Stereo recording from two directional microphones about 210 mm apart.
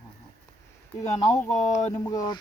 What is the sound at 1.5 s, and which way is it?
Speech, 35° left (ahead or behind).